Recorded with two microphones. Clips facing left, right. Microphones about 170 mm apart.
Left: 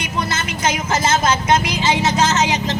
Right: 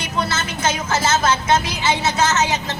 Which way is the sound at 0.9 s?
15° left (ahead or behind).